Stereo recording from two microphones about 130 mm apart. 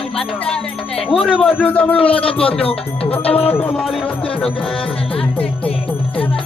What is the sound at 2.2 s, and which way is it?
Speech, 45° left (ahead or behind).